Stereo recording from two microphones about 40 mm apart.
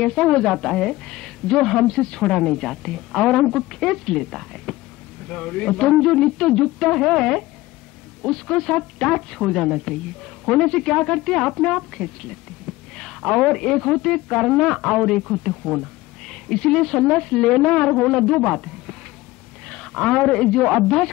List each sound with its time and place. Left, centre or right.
0.0 s speech: centre
1.6 s speech: centre
1.9 s speech: left; by 4.7 s centre
5.3 s speech: left
7.0 s speech: centre
8.2 s speech: centre
12.9 s a sound: centre
13.5 s speech: centre
15.6 s a sound: centre
16.4 s speech: left
19.9 s a woman's voice: centre